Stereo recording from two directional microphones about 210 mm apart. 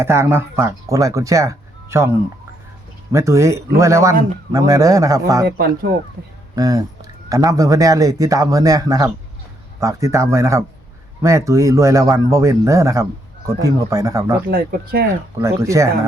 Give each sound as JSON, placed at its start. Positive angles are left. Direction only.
{"t": 0.0, "sound": "speech", "side_deg": -10}
{"t": 5.5, "sound": "speech", "side_deg": -50}
{"t": 6.6, "sound": "speech", "side_deg": -15}
{"t": 14.4, "sound": "speech", "side_deg": -45}
{"t": 15.4, "sound": "speech", "side_deg": -15}